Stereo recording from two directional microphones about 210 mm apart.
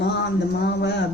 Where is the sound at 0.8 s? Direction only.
55° left (ahead or behind).